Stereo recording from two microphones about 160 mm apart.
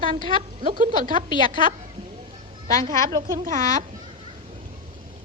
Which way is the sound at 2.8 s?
25° right (ahead or behind).